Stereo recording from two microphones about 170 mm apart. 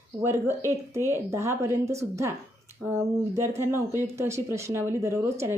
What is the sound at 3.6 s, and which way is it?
Speech, 15° right (ahead or behind).